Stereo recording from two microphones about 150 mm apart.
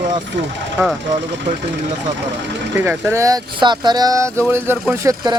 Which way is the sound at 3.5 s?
30° right (ahead or behind).